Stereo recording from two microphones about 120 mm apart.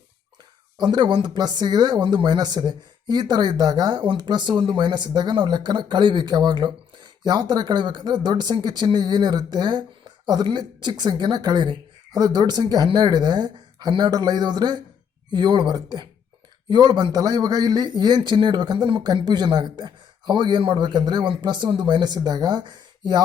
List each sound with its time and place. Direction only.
0.8 s speech: 40° right (ahead or behind)